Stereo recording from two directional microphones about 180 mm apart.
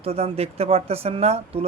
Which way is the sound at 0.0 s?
35° right (ahead or behind).